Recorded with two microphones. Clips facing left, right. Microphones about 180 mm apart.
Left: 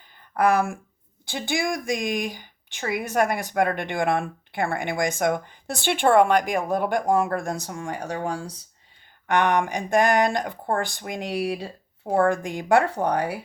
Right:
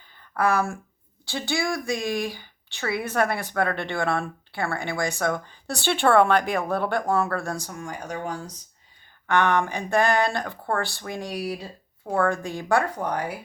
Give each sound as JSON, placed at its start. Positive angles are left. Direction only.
{"t": 0.3, "sound": "speech", "side_deg": 20}
{"t": 9.2, "sound": "speech", "side_deg": 15}
{"t": 12.3, "sound": "speech", "side_deg": 15}